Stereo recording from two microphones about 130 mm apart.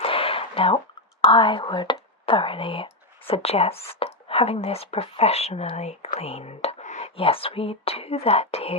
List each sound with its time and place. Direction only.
0.0 s a sound: 45° left (ahead or behind)
1.2 s speech: 40° left (ahead or behind); by 7.1 s 60° left (ahead or behind)
7.2 s speech: 45° left (ahead or behind)